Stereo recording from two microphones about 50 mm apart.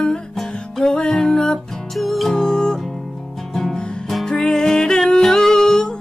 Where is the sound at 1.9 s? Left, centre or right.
Centre.